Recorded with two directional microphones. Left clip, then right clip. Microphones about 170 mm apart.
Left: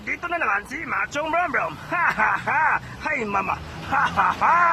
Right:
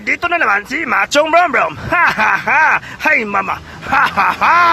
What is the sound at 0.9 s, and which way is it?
Speech, 45° right (ahead or behind).